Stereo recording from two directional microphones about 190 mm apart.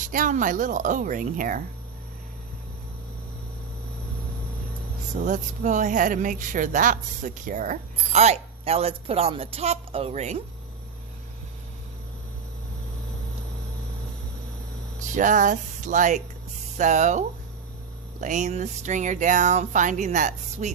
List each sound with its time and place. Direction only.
0.1 s speech: 45° right (ahead or behind)
5.1 s speech: 45° right (ahead or behind)
15.1 s speech: 40° right (ahead or behind)